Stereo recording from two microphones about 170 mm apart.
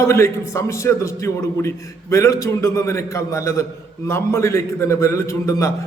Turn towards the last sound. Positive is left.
turn(degrees=20)  # may be behind; listen again after turning